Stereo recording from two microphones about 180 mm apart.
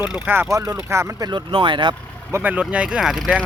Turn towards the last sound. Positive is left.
turn(degrees=0)  # may be behind; listen again after turning